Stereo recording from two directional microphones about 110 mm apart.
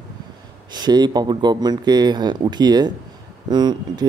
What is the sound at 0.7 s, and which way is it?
Speech, 40° right (ahead or behind).